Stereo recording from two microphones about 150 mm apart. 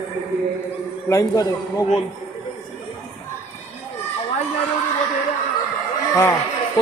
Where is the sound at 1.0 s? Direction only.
20° left (ahead or behind).